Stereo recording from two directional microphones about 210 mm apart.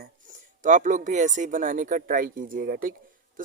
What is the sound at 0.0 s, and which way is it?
Speech, 40° right (ahead or behind).